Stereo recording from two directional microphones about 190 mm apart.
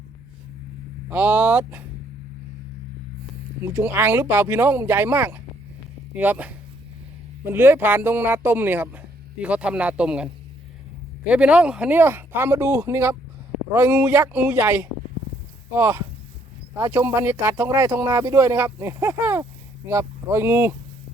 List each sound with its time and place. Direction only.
1.1 s speech: 10° right (ahead or behind)
3.6 s speech: 10° right (ahead or behind)
11.3 s speech: 5° right (ahead or behind)